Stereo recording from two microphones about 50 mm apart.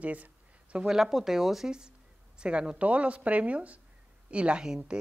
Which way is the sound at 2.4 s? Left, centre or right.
Centre.